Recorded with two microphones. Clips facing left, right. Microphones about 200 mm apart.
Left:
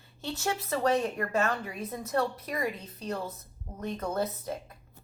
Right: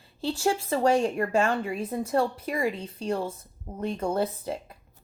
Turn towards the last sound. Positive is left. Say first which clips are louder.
# right 4 dB
turn(degrees=-30)  # may be behind; listen again after turning